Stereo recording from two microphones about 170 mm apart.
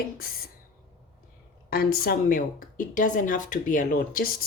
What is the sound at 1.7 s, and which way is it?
Speech, 60° left (ahead or behind).